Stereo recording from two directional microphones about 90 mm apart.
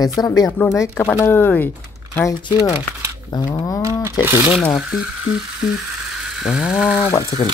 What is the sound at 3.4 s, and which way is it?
Speech, 45° left (ahead or behind).